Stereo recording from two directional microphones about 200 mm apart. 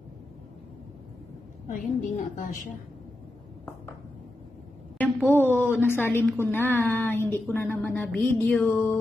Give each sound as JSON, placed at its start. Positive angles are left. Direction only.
{"t": 1.8, "sound": "a woman's voice", "side_deg": 40}
{"t": 4.9, "sound": "a sound", "side_deg": 10}
{"t": 5.8, "sound": "a woman's voice", "side_deg": 10}